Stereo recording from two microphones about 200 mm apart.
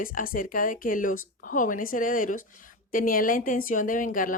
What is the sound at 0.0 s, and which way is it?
A woman's voice, 45° left (ahead or behind).